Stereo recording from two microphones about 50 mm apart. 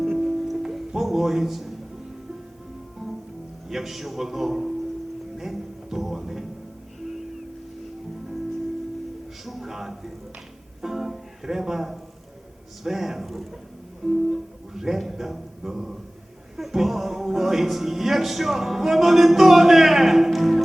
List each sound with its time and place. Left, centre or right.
0.0 s music: centre
3.7 s speech: centre
5.4 s music: centre
9.4 s a sound: centre
10.8 s music: centre
12.8 s speech: centre